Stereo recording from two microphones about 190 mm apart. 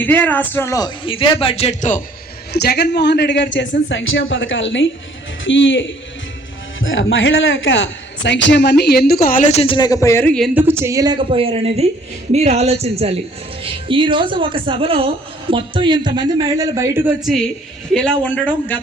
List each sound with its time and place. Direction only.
0.0 s speech: 10° left (ahead or behind); by 2.0 s 35° left (ahead or behind)
2.5 s a man's voice: 60° left (ahead or behind)
3.8 s a woman's voice: 85° left
6.7 s a man's voice: 90° left; by 10.5 s 5° left (ahead or behind)
10.5 s a woman's voice: 10° right (ahead or behind)
17.2 s a man's voice: centre (ahead or behind)